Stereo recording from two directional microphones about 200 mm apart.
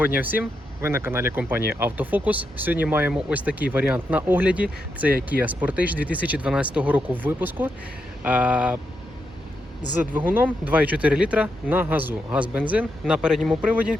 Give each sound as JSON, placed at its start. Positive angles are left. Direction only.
{"t": 0.0, "sound": "speech", "side_deg": -10}
{"t": 9.9, "sound": "speech", "side_deg": -10}